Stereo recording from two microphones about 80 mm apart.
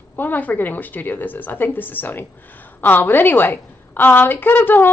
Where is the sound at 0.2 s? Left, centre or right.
Left.